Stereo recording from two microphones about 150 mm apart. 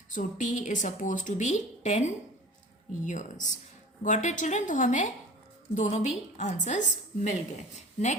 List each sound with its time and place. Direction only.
0.1 s a woman's voice: 60° left (ahead or behind)